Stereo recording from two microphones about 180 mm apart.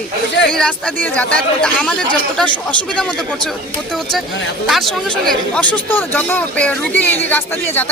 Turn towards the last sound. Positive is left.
turn(degrees=10)  # may be behind; listen again after turning